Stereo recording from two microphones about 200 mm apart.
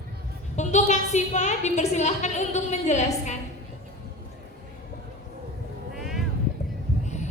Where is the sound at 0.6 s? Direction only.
35° left (ahead or behind).